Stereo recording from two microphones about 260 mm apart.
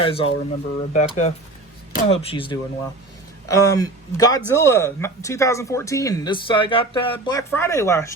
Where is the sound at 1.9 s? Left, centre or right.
Left.